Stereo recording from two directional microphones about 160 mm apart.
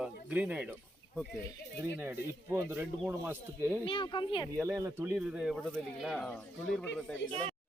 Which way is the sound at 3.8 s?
30° left (ahead or behind).